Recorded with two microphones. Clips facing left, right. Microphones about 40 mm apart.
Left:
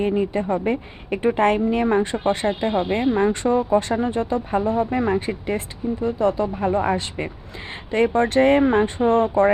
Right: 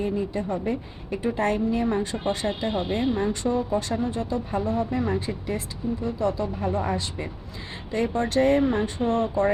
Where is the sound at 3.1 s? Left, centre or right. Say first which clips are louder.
Left 6 dB; left.